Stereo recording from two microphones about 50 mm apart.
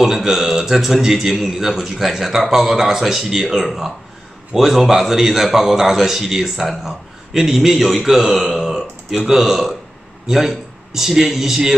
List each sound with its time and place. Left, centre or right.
0.0 s a man's voice: centre